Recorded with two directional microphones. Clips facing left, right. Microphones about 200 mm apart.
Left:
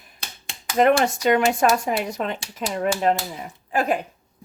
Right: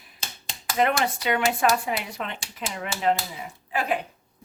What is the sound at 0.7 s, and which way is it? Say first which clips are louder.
Speech: left 6 dB; 45° left (ahead or behind).